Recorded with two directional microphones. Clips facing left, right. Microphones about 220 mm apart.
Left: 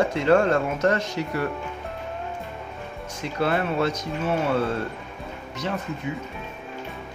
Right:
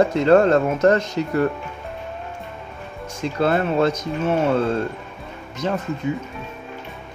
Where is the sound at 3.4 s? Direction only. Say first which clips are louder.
Right 4 dB; 50° right (ahead or behind).